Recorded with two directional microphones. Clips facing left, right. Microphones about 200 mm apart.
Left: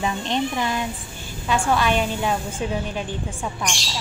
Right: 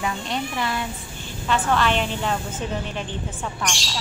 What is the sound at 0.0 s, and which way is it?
Speech, 20° left (ahead or behind).